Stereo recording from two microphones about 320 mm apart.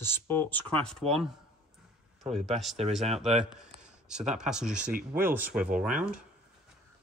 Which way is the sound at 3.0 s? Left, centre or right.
Centre.